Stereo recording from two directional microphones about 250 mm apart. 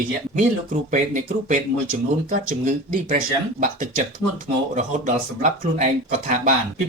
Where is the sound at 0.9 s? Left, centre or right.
Right.